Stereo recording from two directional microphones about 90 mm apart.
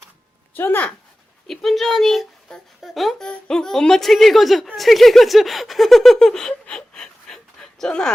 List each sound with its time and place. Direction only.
0.5 s speech: 25° left (ahead or behind)
1.5 s speech: centre (ahead or behind)